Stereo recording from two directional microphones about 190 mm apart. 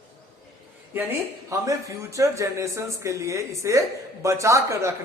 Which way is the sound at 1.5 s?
15° right (ahead or behind).